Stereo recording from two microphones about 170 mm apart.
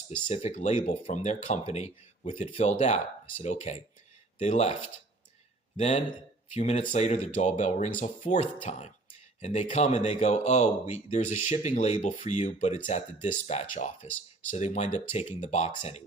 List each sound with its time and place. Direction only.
0.3 s speech: 40° left (ahead or behind)